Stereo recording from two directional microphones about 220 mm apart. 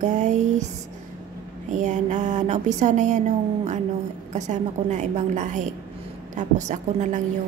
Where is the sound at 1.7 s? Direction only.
35° right (ahead or behind).